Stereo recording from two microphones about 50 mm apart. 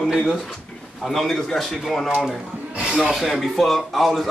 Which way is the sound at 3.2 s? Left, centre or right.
Centre.